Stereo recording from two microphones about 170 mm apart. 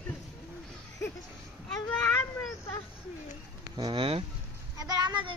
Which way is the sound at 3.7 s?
30° right (ahead or behind).